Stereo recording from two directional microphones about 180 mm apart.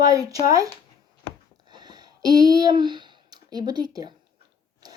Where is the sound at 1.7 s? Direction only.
25° right (ahead or behind).